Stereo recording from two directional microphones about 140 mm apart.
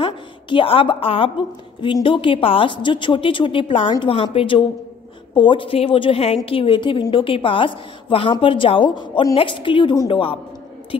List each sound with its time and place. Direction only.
0.0 s a woman's voice: 35° left (ahead or behind)